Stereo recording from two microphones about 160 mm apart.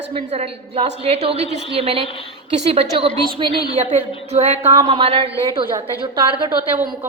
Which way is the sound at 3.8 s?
40° right (ahead or behind).